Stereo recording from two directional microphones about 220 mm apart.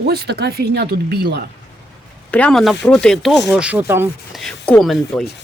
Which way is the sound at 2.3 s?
5° left (ahead or behind).